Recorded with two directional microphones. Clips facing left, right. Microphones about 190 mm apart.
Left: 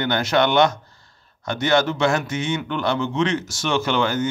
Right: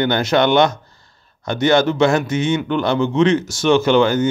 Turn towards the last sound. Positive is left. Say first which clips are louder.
# right 7 dB
turn(degrees=-20)  # may be behind; listen again after turning